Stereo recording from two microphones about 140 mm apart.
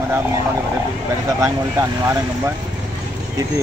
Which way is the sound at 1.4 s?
20° right (ahead or behind).